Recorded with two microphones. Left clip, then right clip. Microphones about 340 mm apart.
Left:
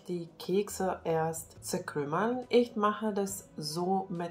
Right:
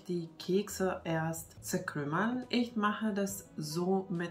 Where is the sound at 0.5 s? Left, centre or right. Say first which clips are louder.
Left 2 dB; centre.